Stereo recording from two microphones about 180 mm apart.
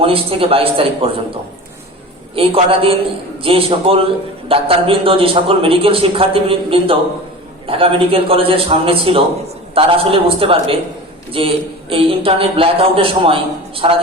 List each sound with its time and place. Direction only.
0.0 s a man's voice: 30° right (ahead or behind)